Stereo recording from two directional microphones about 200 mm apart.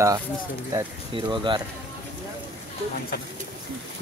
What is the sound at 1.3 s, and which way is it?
Speech, 25° right (ahead or behind).